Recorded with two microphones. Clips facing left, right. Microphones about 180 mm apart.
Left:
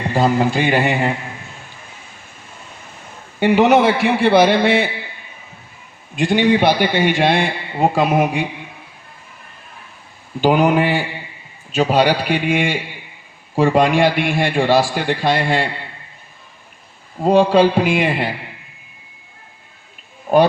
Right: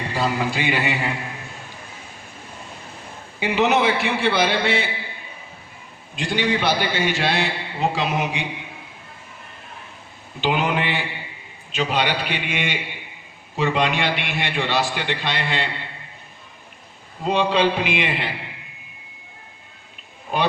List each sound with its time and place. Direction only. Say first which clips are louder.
0.1 s a man's voice: left 8 dB; 45° left (ahead or behind)
3.4 s a man's voice: left 7 dB; 50° left (ahead or behind)
6.1 s a man's voice: left 8 dB; 55° left (ahead or behind)
10.4 s a man's voice: left 8 dB; 45° left (ahead or behind)
17.2 s a man's voice: left 7 dB; 45° left (ahead or behind)